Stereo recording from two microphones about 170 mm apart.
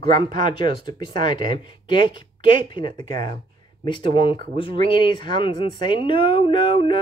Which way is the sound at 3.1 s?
50° right (ahead or behind).